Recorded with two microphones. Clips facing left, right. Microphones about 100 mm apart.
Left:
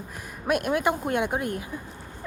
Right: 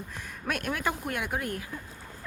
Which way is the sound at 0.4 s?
10° left (ahead or behind).